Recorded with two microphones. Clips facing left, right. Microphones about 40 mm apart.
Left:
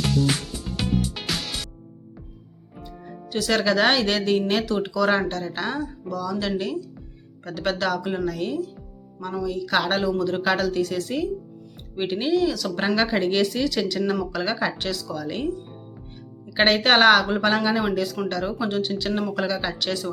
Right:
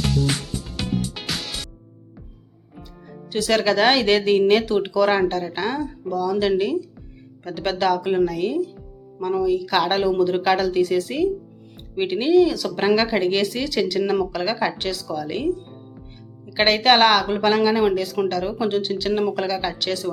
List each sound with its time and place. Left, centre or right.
0.0 s music: centre
3.3 s speech: centre
7.4 s speech: centre
16.6 s speech: centre